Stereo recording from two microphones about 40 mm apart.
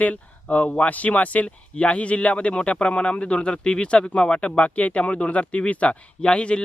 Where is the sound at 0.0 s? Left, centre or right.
Left.